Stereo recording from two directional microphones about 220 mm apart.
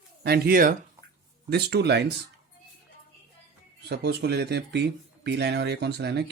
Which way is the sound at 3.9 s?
45° right (ahead or behind).